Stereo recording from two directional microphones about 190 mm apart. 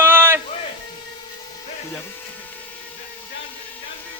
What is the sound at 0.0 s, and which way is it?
Music, 10° right (ahead or behind).